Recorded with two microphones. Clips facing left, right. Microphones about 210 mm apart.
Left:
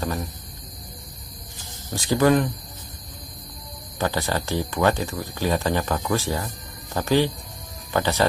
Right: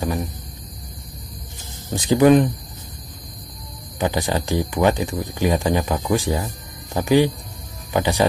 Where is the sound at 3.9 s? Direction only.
15° right (ahead or behind).